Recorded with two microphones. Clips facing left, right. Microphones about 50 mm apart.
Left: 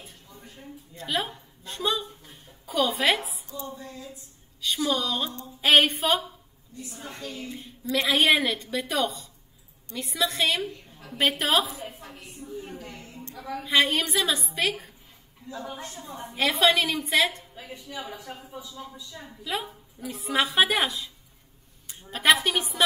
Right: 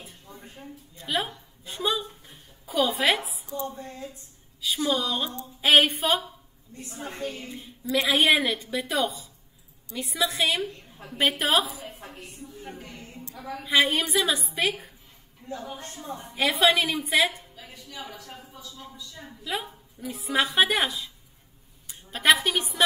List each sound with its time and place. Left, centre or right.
0.3 s a sound: right
0.9 s a woman's voice: centre
3.4 s a sound: right
4.6 s a woman's voice: centre
6.7 s a sound: right
7.5 s a woman's voice: centre
12.8 s a woman's voice: left
13.3 s a woman's voice: centre
15.4 s a woman's voice: right
15.8 s a sound: right
16.3 s a woman's voice: centre
17.6 s a woman's voice: left
19.2 s a woman's voice: centre
22.1 s a woman's voice: centre